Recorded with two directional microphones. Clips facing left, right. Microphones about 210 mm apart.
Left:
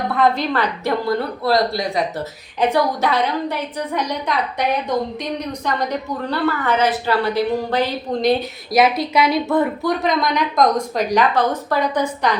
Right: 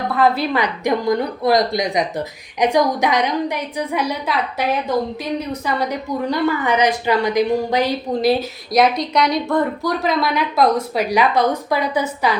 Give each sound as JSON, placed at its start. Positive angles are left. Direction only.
{"t": 0.1, "sound": "a woman's voice", "side_deg": -5}